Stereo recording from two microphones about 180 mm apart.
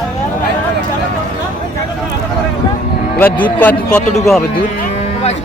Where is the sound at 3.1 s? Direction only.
10° left (ahead or behind).